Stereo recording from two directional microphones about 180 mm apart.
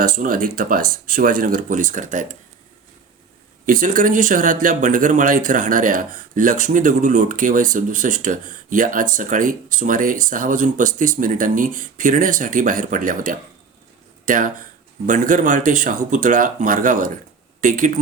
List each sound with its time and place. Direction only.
0.0 s speech: 50° right (ahead or behind)
3.7 s speech: 45° right (ahead or behind)